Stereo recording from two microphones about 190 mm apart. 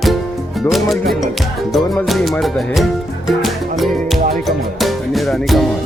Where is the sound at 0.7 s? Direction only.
Centre (ahead or behind).